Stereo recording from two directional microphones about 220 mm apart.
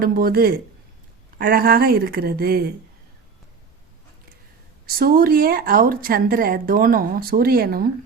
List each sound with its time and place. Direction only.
0.0 s speech: 40° right (ahead or behind)
4.9 s a woman's voice: 40° right (ahead or behind)